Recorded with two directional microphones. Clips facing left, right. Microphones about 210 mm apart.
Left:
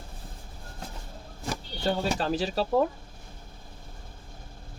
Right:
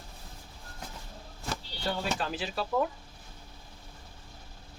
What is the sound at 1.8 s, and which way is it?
Speech, 35° left (ahead or behind).